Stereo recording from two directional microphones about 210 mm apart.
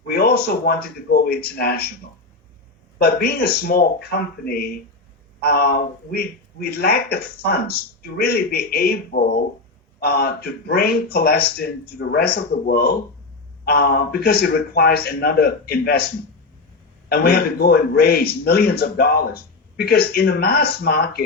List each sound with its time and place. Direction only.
0.1 s a man's voice: 50° left (ahead or behind)
3.0 s a man's voice: 45° left (ahead or behind)
17.1 s a man's voice: 45° left (ahead or behind)